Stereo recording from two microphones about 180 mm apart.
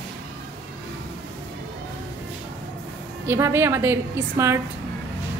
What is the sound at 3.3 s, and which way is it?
A woman's voice, 15° right (ahead or behind).